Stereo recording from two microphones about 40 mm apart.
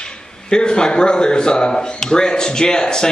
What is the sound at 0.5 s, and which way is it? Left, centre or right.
Speech, left.